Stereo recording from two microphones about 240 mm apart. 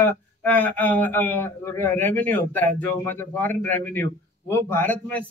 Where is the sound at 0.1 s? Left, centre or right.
Centre.